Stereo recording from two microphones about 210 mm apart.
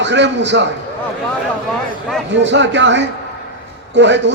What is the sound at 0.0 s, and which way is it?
Speech, 55° right (ahead or behind).